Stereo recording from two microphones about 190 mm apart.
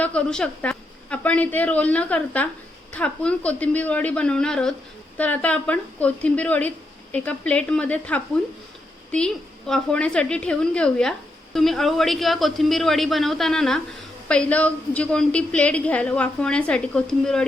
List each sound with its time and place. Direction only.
0.0 s a woman's voice: 5° left (ahead or behind)